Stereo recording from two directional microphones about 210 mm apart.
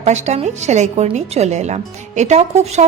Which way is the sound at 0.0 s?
35° right (ahead or behind).